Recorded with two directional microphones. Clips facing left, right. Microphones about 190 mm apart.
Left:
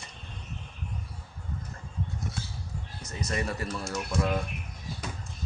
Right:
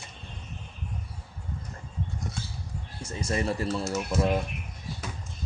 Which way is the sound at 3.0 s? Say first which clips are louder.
Right 4 dB; 30° right (ahead or behind).